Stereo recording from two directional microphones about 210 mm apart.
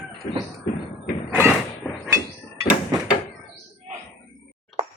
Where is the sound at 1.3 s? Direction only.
5° right (ahead or behind).